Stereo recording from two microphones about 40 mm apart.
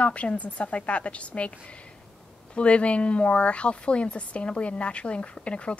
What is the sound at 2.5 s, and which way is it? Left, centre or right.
Speech, left.